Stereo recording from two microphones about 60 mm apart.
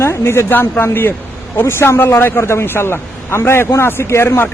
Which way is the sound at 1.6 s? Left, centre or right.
Left.